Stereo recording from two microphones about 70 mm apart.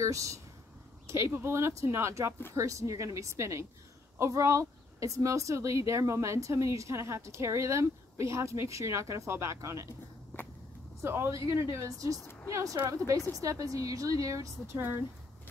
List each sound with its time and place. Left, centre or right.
0.0 s speech: right
11.0 s speech: right
14.8 s speech: right